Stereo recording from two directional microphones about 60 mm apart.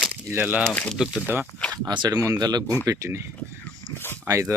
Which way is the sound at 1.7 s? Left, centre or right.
Right.